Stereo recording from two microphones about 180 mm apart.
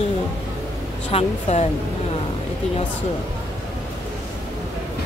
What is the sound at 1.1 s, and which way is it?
Speech, 35° left (ahead or behind).